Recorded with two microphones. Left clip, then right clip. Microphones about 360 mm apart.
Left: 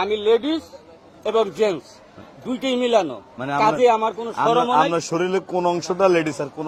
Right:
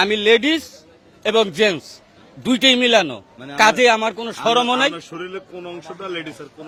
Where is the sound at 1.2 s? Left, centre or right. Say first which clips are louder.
Right 3 dB; right.